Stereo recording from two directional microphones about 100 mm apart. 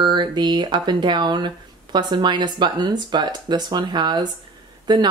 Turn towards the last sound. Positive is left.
turn(degrees=-45)  # may be behind; listen again after turning